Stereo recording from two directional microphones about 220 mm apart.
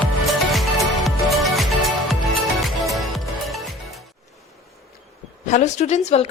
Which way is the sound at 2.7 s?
Centre (ahead or behind).